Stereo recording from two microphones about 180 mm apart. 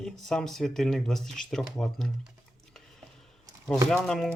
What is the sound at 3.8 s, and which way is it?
Speech, 5° left (ahead or behind).